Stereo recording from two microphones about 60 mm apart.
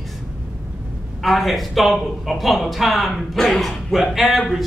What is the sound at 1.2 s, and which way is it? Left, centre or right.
A woman's voice, centre.